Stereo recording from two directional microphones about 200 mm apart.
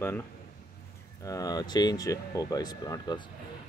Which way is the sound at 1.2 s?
20° left (ahead or behind).